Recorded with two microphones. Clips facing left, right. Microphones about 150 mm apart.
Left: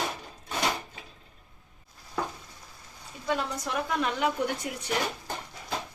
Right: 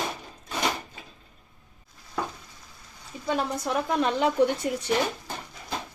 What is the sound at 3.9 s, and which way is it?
Speech, 30° right (ahead or behind).